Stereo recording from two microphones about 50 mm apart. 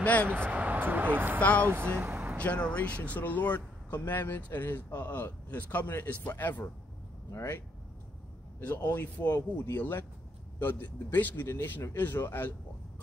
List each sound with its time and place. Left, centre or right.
0.0 s speech: left
0.3 s speech: right
1.4 s speech: left
1.7 s speech: right
2.3 s speech: left
3.9 s speech: left
8.5 s speech: left
9.7 s speech: left
10.6 s speech: left